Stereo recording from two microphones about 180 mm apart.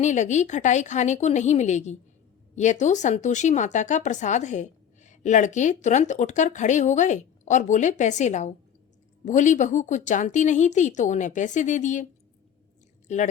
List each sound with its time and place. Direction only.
0.0 s speech: 40° left (ahead or behind)
13.1 s speech: 40° left (ahead or behind)